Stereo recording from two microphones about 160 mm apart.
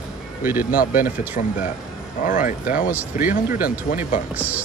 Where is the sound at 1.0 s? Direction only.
60° left (ahead or behind).